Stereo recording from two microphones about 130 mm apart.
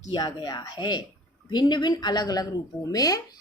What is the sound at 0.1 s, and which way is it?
A woman's voice, 30° left (ahead or behind).